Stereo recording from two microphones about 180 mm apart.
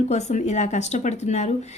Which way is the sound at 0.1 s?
40° left (ahead or behind).